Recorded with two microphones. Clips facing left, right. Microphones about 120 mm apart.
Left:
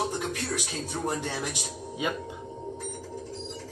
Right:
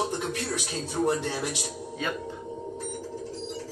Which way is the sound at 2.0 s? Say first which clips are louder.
Left 1 dB; 15° left (ahead or behind).